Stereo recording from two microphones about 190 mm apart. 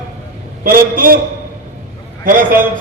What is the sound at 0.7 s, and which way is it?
Speech, 50° right (ahead or behind).